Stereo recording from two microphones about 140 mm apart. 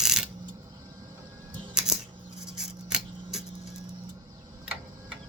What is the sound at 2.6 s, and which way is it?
Scissors, 5° right (ahead or behind).